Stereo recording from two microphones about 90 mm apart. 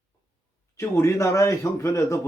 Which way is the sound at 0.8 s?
30° left (ahead or behind).